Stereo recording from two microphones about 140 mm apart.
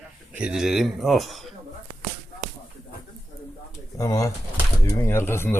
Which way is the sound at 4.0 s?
25° left (ahead or behind).